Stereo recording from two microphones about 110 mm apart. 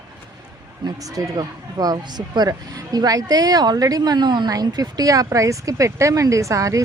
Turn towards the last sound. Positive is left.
turn(degrees=-30)  # may be behind; listen again after turning